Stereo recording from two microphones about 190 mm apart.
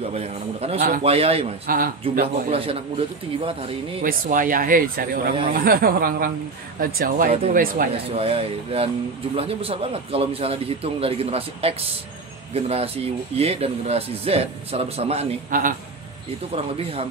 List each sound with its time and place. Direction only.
0.0 s a sound: 35° right (ahead or behind)
0.7 s speech: 45° right (ahead or behind)
1.0 s speech: 30° right (ahead or behind)
1.7 s speech: 50° right (ahead or behind)
2.5 s a man's voice: 30° right (ahead or behind)
4.0 s speech: 45° right (ahead or behind)
8.2 s speech: 30° right (ahead or behind)
15.5 s speech: 45° right (ahead or behind)
16.5 s speech: 30° right (ahead or behind)